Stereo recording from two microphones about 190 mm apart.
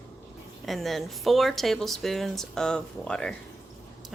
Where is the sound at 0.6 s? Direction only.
Centre (ahead or behind).